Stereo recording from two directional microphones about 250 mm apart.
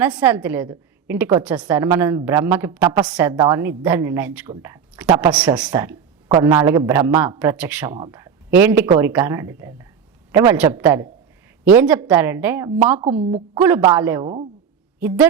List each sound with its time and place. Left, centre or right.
0.0 s a woman's voice: centre
12.9 s a woman's voice: centre